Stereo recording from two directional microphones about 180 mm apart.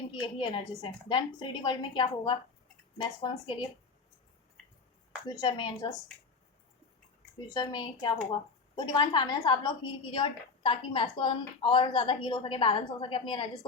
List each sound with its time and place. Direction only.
0.1 s a woman's voice: 25° left (ahead or behind)
5.3 s a woman's voice: 20° left (ahead or behind)
7.5 s a woman's voice: 20° left (ahead or behind)